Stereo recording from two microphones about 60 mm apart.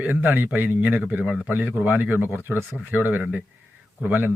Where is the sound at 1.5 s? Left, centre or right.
Right.